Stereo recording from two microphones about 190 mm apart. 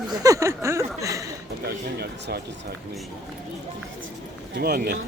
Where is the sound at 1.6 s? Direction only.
55° right (ahead or behind).